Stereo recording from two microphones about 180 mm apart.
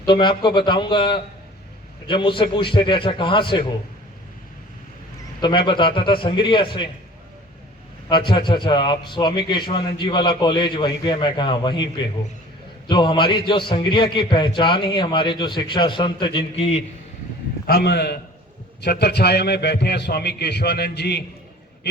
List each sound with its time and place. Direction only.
0.0 s a man's voice: 25° left (ahead or behind)
5.4 s a man's voice: 25° left (ahead or behind)
8.1 s a man's voice: 25° left (ahead or behind)
17.7 s a man's voice: 65° left (ahead or behind)